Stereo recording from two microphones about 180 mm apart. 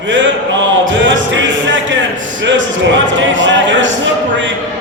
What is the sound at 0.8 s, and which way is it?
Music, 90° right.